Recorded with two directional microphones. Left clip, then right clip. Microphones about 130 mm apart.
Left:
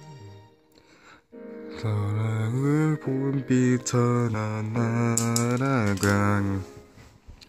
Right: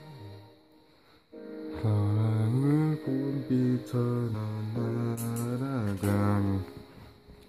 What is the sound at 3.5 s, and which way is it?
Mantra, 25° left (ahead or behind).